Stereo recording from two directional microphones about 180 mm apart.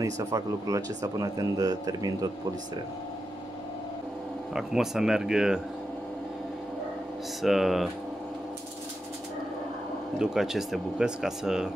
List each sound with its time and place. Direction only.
0.0 s speech: 20° right (ahead or behind)
4.6 s speech: centre (ahead or behind)
7.4 s speech: centre (ahead or behind)
10.1 s speech: 5° right (ahead or behind)